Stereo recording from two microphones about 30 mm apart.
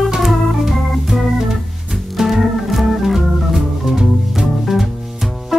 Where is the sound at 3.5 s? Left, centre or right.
Centre.